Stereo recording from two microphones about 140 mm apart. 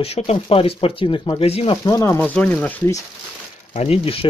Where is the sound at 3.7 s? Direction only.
50° left (ahead or behind).